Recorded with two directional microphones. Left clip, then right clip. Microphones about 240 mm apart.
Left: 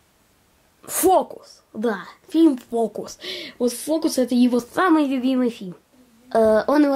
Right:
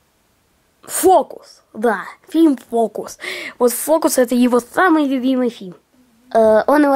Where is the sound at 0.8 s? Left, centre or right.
Centre.